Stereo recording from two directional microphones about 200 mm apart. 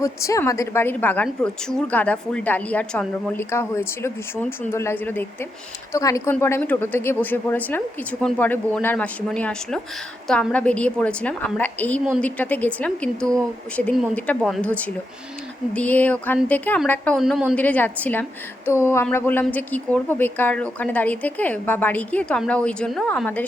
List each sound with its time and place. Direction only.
0.0 s a woman's voice: 15° left (ahead or behind)